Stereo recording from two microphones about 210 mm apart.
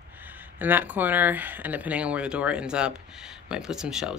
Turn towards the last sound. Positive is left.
turn(degrees=-5)  # may be behind; listen again after turning